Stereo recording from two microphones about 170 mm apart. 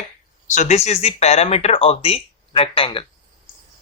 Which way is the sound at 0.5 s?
40° left (ahead or behind).